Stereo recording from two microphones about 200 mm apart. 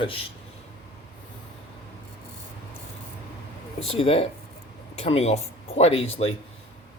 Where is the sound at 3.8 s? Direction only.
30° left (ahead or behind).